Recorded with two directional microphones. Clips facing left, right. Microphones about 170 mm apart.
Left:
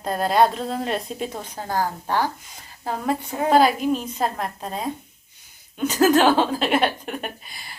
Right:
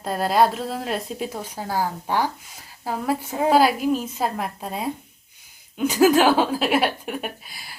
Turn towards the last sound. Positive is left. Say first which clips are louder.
# right 1 dB
turn(degrees=-5)  # may be behind; listen again after turning